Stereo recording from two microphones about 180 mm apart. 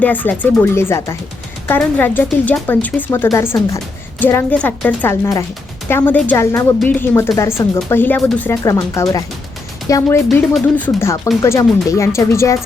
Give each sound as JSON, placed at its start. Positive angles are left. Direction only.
{"t": 0.0, "sound": "speech", "side_deg": 10}